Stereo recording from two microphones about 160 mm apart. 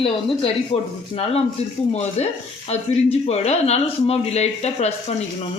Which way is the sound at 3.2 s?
40° left (ahead or behind).